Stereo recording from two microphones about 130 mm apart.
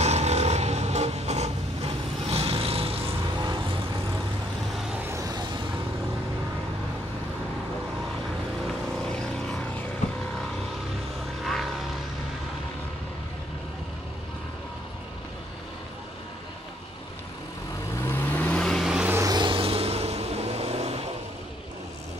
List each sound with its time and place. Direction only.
0.0 s vehicle: 55° right (ahead or behind)
5.1 s vehicle: 30° right (ahead or behind)
11.4 s vehicle: centre (ahead or behind)
17.9 s vehicle: 20° left (ahead or behind); by 19.0 s centre (ahead or behind)
19.0 s vehicle: 20° right (ahead or behind)
19.3 s vehicle: 40° right (ahead or behind)